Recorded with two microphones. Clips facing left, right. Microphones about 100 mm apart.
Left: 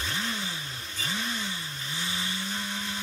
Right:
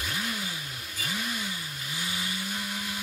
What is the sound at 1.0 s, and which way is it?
Vehicle, 10° right (ahead or behind).